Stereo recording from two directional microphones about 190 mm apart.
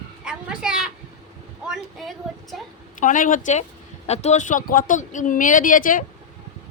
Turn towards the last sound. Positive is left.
turn(degrees=45)  # may be behind; listen again after turning